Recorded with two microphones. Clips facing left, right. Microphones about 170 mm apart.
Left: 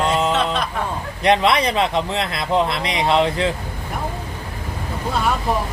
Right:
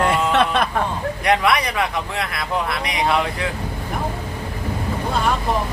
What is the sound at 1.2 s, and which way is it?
Speech, 25° left (ahead or behind).